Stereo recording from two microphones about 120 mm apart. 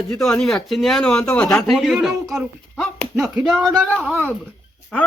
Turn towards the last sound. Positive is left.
turn(degrees=5)  # may be behind; listen again after turning